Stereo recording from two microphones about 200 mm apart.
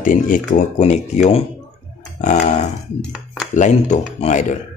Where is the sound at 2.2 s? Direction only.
35° left (ahead or behind).